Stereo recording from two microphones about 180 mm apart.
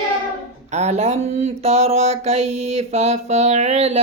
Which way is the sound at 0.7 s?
40° right (ahead or behind).